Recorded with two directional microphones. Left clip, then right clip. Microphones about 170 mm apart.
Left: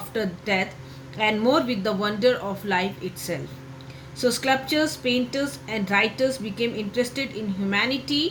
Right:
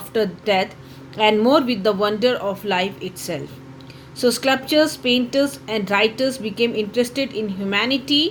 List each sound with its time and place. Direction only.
0.1 s a woman's voice: 40° right (ahead or behind)